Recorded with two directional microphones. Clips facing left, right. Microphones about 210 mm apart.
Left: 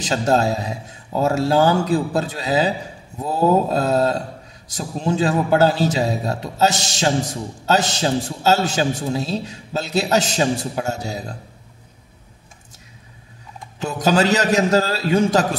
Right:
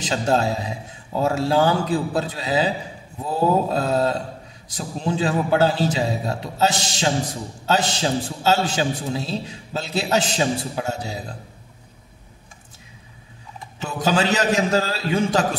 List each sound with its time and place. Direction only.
0.0 s a man's voice: 40° left (ahead or behind)
13.9 s a man's voice: 40° left (ahead or behind)